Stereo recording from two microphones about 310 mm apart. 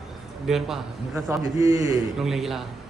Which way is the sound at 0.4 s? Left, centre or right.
Centre.